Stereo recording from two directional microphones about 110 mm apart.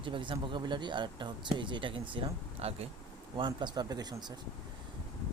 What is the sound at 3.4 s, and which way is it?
Speech, 45° right (ahead or behind).